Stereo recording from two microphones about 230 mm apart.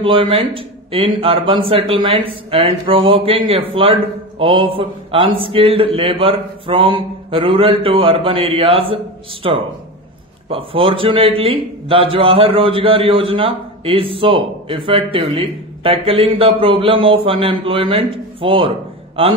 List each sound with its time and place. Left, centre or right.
0.0 s speech: right